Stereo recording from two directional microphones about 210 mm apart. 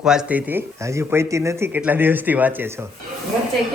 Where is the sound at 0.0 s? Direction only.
5° right (ahead or behind).